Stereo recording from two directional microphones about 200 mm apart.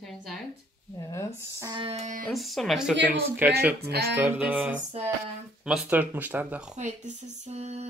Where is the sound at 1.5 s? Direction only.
15° right (ahead or behind).